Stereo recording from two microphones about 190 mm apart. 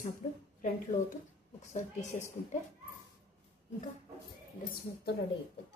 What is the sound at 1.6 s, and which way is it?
Speech, 40° left (ahead or behind).